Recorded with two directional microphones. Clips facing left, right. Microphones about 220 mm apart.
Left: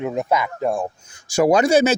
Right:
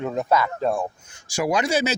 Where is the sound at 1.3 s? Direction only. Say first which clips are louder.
Left 7 dB; 45° left (ahead or behind).